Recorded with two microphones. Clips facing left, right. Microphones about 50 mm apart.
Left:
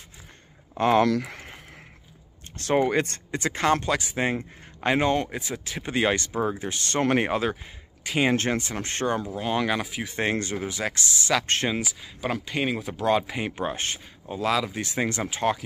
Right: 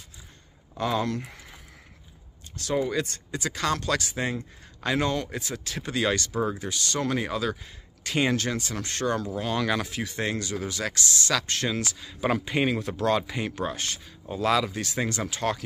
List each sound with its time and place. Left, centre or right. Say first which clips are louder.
0.7 s speech: left 7 dB; left
1.0 s speech: left 7 dB; left
2.5 s speech: left 4 dB; left
8.0 s speech: left 1 dB; centre
8.3 s speech: left 3 dB; left; by 10.0 s centre
10.0 s speech: left 3 dB; left
11.4 s speech: left 3 dB; left
11.8 s speech: even; centre
12.2 s speech: right 3 dB; centre
12.6 s speech: left 3 dB; centre; by 14.0 s left
14.3 s speech: right 1 dB; centre
14.7 s speech: left 2 dB; left